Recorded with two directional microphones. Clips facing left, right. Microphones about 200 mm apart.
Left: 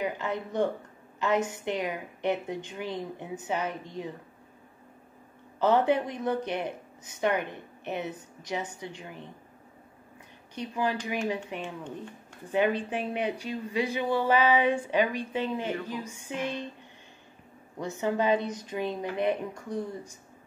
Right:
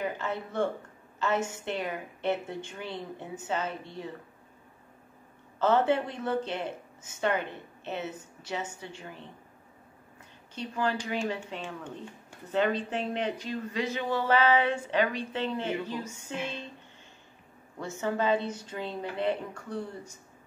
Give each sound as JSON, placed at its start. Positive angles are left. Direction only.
{"t": 0.0, "sound": "speech", "side_deg": 15}
{"t": 5.6, "sound": "speech", "side_deg": 15}
{"t": 10.5, "sound": "speech", "side_deg": 15}
{"t": 17.7, "sound": "speech", "side_deg": 15}